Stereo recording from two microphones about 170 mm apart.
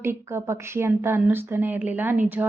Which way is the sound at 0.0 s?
15° right (ahead or behind).